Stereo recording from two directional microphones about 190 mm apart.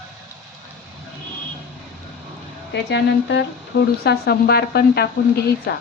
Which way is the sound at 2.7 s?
65° left (ahead or behind).